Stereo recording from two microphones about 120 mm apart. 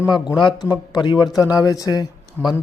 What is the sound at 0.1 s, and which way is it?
A man's voice, 40° left (ahead or behind).